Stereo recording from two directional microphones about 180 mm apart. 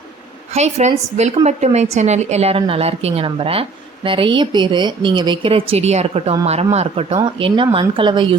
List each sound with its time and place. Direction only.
0.5 s a woman's voice: 40° right (ahead or behind)